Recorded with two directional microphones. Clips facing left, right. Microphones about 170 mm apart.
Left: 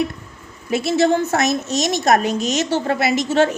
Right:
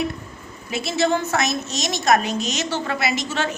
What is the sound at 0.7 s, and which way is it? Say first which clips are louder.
A woman's voice: left 5 dB; 50° left (ahead or behind).